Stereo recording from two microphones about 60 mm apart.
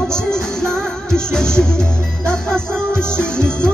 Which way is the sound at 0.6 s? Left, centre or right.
Centre.